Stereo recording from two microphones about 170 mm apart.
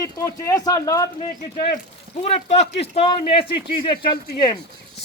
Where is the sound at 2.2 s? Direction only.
40° left (ahead or behind).